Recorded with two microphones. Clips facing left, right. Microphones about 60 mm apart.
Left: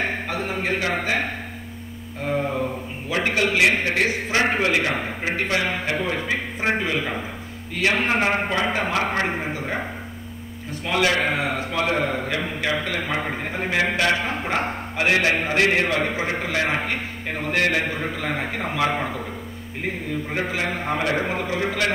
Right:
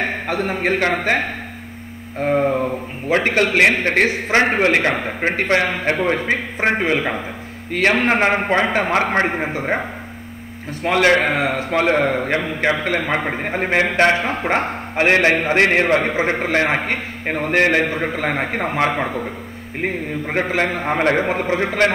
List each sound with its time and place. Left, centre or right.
0.3 s a man's voice: right
2.1 s a man's voice: right
5.7 s a man's voice: right
6.0 s a man's voice: right
10.8 s a man's voice: right